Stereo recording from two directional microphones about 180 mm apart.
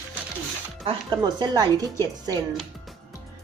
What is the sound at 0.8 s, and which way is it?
Speech, 25° right (ahead or behind).